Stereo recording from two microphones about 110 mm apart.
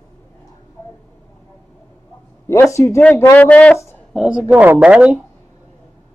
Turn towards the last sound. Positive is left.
turn(degrees=-10)  # may be behind; listen again after turning